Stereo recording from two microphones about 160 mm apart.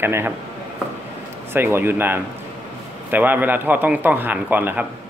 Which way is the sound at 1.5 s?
15° right (ahead or behind).